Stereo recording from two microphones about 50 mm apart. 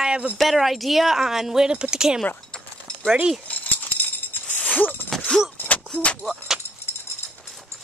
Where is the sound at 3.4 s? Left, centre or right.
Left.